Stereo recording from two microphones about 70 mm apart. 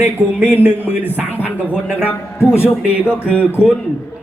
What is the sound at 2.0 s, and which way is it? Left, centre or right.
Speech, left.